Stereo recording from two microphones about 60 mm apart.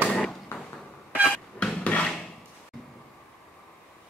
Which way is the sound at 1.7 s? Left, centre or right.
Left.